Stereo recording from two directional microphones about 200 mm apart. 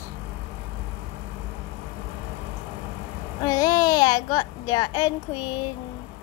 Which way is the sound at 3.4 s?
20° left (ahead or behind).